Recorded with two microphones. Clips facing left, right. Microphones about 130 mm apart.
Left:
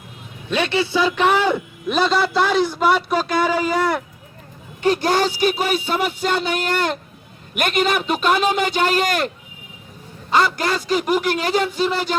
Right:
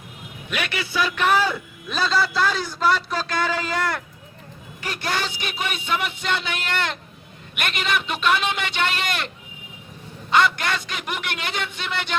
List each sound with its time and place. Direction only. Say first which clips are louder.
0.5 s a man's voice: left 7 dB; 25° left (ahead or behind)
4.8 s speech: left 10 dB; 35° left (ahead or behind)
10.3 s speech: left 2 dB; 35° left (ahead or behind)